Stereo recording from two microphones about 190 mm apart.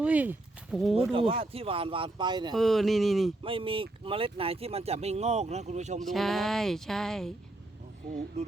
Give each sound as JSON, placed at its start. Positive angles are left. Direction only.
{"t": 0.0, "sound": "speech", "side_deg": -10}
{"t": 0.9, "sound": "speech", "side_deg": -30}
{"t": 2.6, "sound": "speech", "side_deg": 0}
{"t": 3.4, "sound": "speech", "side_deg": -30}
{"t": 6.0, "sound": "speech", "side_deg": 0}
{"t": 8.4, "sound": "speech", "side_deg": -35}